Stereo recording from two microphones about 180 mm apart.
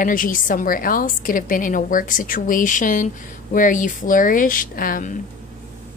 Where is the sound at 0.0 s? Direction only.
50° left (ahead or behind).